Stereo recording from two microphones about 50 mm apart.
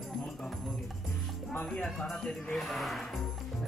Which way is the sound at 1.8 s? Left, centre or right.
Centre.